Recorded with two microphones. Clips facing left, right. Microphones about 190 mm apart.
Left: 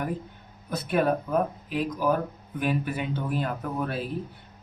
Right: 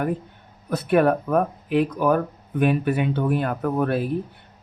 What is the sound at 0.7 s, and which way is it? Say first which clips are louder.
Speech: right 6 dB; 60° right (ahead or behind).